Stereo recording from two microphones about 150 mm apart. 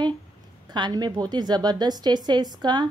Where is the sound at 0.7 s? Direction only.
30° right (ahead or behind).